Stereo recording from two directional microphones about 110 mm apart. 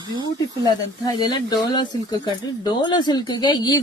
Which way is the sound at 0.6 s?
35° left (ahead or behind).